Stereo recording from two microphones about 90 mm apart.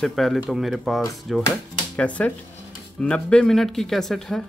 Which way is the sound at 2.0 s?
15° left (ahead or behind).